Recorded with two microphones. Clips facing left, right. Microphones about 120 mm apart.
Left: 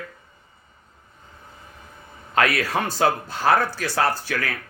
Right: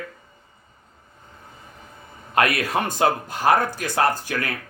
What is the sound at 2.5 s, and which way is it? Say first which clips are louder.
Speech: even; 20° right (ahead or behind).